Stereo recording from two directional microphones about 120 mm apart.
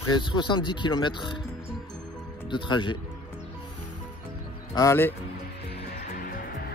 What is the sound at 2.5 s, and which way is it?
Mantra, 40° left (ahead or behind).